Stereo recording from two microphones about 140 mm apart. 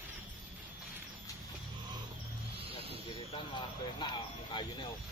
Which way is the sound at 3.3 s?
35° left (ahead or behind).